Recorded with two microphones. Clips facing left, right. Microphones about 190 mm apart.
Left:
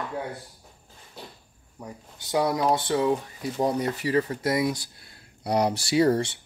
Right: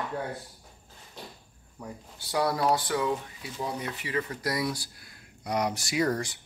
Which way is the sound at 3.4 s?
45° left (ahead or behind).